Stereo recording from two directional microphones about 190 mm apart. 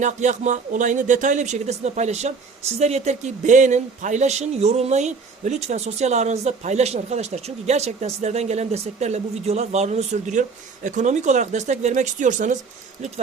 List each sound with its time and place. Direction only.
0.0 s speech: 40° right (ahead or behind)